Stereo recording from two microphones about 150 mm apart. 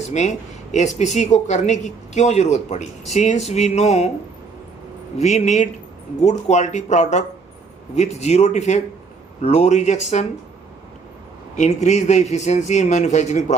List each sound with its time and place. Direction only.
0.1 s speech: 50° left (ahead or behind)
5.2 s speech: 50° left (ahead or behind)
11.5 s speech: 50° left (ahead or behind)